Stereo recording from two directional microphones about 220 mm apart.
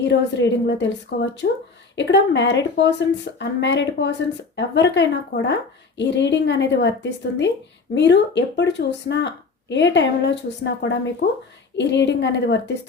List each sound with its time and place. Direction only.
0.1 s speech: 55° left (ahead or behind)